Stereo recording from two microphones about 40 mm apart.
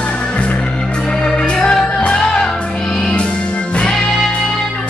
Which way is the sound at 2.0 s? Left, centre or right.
Left.